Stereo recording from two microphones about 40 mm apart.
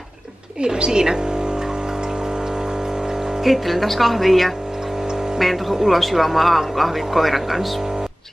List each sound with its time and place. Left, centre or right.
0.6 s speech: right
3.4 s speech: centre